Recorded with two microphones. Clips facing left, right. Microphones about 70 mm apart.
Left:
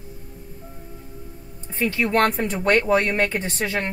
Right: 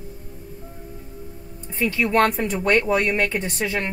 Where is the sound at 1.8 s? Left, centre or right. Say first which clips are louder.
Right 1 dB; centre.